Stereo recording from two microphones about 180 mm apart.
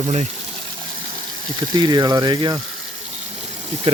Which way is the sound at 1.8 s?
25° right (ahead or behind).